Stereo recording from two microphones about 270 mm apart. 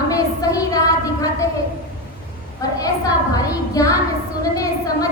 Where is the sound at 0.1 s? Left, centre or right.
Centre.